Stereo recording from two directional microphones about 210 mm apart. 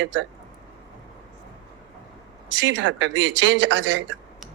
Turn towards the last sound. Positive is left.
turn(degrees=-60)  # may be behind; listen again after turning